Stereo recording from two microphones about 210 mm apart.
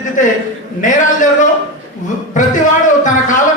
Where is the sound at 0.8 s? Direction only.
35° left (ahead or behind).